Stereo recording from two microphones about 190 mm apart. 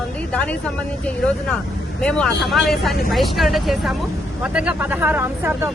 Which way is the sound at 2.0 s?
5° left (ahead or behind).